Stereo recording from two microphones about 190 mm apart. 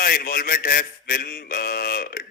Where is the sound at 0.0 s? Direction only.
50° left (ahead or behind).